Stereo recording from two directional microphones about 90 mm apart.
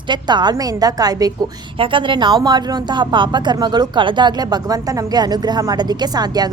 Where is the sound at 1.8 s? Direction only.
65° right (ahead or behind).